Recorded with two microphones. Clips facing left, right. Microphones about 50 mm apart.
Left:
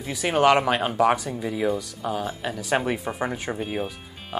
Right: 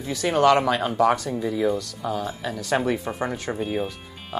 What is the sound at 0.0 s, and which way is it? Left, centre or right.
Speech, centre.